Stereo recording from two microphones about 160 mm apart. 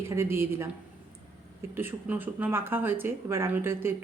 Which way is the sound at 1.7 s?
15° right (ahead or behind).